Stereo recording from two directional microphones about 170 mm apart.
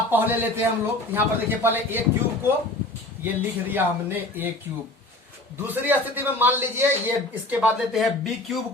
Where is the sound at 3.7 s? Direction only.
10° right (ahead or behind).